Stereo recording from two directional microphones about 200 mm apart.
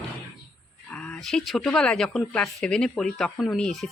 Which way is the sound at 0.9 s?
5° left (ahead or behind).